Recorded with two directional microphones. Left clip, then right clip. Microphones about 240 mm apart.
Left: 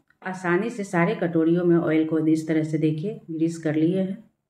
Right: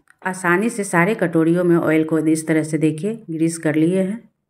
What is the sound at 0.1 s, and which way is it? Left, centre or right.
A woman's voice, right.